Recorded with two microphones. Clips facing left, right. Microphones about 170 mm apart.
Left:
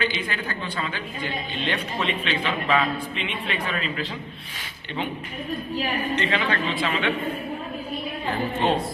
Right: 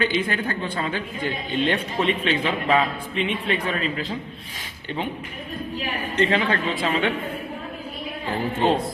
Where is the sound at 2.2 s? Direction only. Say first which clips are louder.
Right 3 dB; 40° right (ahead or behind).